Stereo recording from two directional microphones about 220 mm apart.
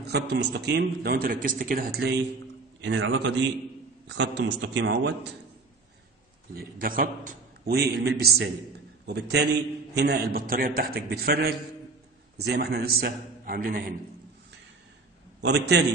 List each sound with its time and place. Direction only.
0.0 s a man's voice: 50° right (ahead or behind)
6.5 s a man's voice: 40° right (ahead or behind)
15.4 s a man's voice: 50° right (ahead or behind)